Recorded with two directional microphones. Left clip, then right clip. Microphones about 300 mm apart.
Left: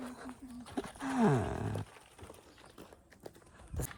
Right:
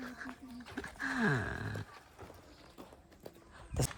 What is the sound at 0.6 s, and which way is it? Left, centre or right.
Dog, left.